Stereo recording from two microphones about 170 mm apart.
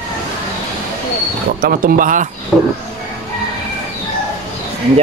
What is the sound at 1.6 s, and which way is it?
Speech, 55° right (ahead or behind).